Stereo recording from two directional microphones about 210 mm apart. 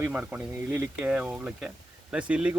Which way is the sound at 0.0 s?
5° right (ahead or behind).